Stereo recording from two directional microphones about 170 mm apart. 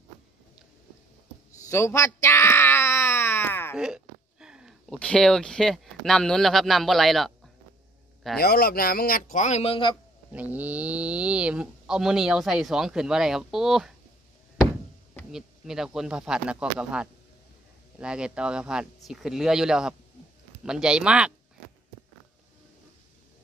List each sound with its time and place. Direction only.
1.7 s a sound: 15° left (ahead or behind)
3.7 s a sound: 5° right (ahead or behind)
4.9 s speech: 5° left (ahead or behind)
8.4 s speech: 65° left (ahead or behind); by 9.9 s 30° left (ahead or behind)
10.3 s speech: 10° right (ahead or behind)
15.3 s speech: 5° right (ahead or behind)